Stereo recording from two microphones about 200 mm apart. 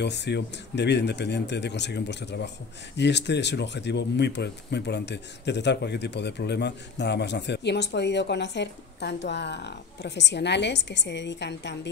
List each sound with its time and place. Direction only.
0.0 s speech: 60° left (ahead or behind)